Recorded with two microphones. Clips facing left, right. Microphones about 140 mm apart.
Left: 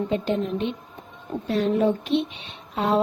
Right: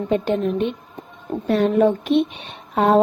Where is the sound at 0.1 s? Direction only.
55° right (ahead or behind).